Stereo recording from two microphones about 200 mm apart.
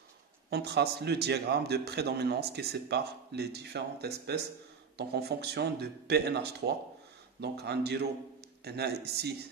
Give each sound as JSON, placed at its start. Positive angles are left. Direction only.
{"t": 0.5, "sound": "a man's voice", "side_deg": -55}